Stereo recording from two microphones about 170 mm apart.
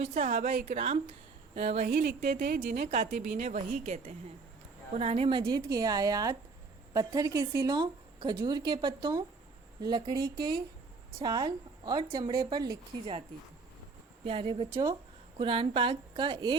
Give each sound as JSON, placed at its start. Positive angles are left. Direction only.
{"t": 0.0, "sound": "a woman's voice", "side_deg": -40}
{"t": 1.9, "sound": "a woman's voice", "side_deg": -65}
{"t": 2.9, "sound": "a woman's voice", "side_deg": -50}
{"t": 10.2, "sound": "a woman's voice", "side_deg": -65}
{"t": 11.2, "sound": "a woman's voice", "side_deg": -25}
{"t": 14.3, "sound": "a woman's voice", "side_deg": -30}
{"t": 14.7, "sound": "speech", "side_deg": -15}
{"t": 15.4, "sound": "a woman's voice", "side_deg": -30}